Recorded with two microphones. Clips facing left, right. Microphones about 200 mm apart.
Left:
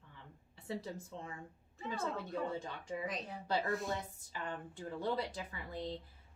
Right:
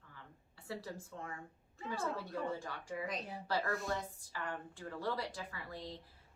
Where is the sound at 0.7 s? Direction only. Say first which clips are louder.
Left 2 dB; 20° left (ahead or behind).